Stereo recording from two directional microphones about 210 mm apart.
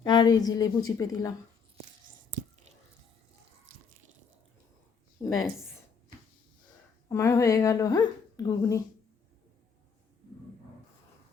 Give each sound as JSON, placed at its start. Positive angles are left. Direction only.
{"t": 0.0, "sound": "a woman's voice", "side_deg": 20}
{"t": 5.2, "sound": "a woman's voice", "side_deg": 15}
{"t": 7.1, "sound": "a woman's voice", "side_deg": 15}